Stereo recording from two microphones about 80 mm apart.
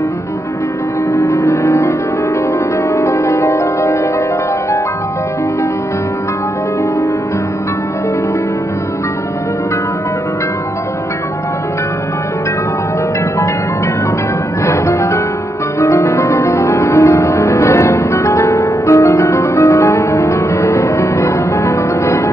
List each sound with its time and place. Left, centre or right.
1.1 s music: left
14.7 s music: left